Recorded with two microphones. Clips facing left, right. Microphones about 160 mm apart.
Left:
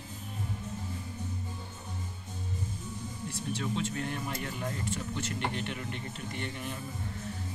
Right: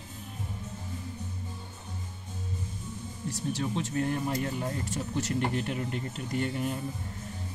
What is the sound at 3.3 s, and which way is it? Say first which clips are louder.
Speech: right 3 dB; 40° right (ahead or behind).